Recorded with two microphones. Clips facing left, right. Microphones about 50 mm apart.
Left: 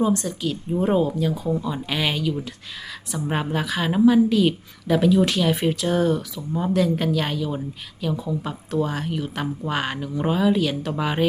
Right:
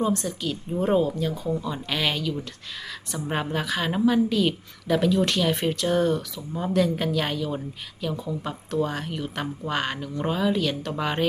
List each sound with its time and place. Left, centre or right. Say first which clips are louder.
0.0 s a woman's voice: left 3 dB; centre